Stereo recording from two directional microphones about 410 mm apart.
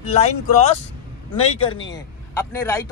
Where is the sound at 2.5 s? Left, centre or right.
Centre.